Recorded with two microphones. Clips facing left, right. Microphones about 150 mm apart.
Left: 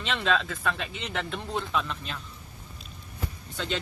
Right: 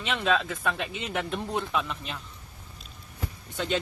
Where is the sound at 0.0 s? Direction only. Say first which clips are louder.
Right 1 dB; 10° right (ahead or behind).